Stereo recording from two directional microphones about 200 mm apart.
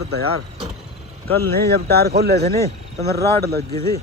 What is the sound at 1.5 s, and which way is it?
Speech, 50° right (ahead or behind).